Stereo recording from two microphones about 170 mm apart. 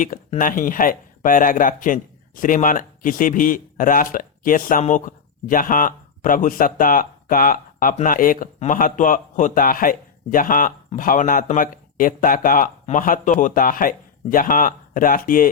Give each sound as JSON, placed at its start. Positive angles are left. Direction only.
{"t": 0.3, "sound": "speech", "side_deg": 50}